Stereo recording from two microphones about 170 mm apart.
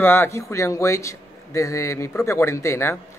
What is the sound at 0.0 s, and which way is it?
A man's voice, 10° left (ahead or behind).